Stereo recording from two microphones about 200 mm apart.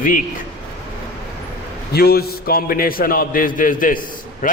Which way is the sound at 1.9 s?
50° left (ahead or behind).